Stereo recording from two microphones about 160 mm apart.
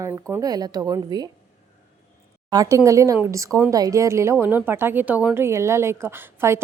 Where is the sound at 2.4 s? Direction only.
20° right (ahead or behind).